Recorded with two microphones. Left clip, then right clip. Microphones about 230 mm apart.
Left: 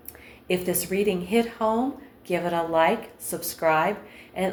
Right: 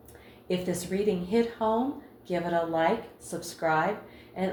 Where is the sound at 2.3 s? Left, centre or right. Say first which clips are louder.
Left 3 dB; left.